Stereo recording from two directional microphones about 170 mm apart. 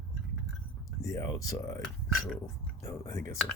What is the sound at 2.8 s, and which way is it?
Speech, 15° left (ahead or behind).